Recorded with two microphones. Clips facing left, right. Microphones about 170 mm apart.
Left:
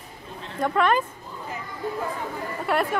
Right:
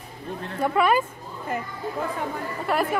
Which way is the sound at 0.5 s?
5° right (ahead or behind).